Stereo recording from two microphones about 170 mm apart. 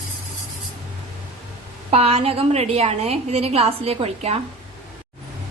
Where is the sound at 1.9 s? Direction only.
35° right (ahead or behind).